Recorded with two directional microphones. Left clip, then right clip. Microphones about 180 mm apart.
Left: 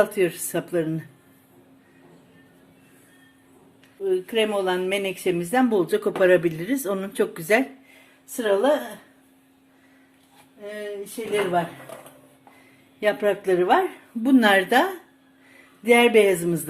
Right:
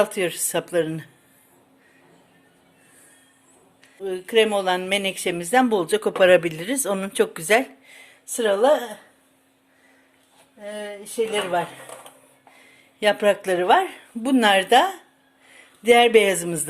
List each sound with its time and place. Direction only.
0.0 s speech: 40° right (ahead or behind)
4.0 s speech: 50° right (ahead or behind)
8.4 s speech: 55° right (ahead or behind)
11.2 s speech: 50° right (ahead or behind)
13.0 s speech: 55° right (ahead or behind)
14.2 s a woman's voice: 35° right (ahead or behind)